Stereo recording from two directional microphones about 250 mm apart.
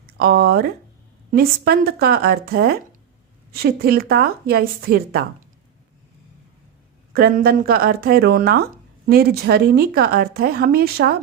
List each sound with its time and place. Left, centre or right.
0.2 s speech: right
7.1 s speech: right